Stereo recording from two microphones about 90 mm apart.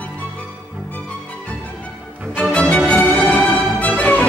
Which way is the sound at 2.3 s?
15° left (ahead or behind).